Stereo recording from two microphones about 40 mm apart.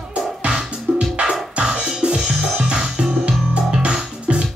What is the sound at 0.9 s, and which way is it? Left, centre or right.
Music, right.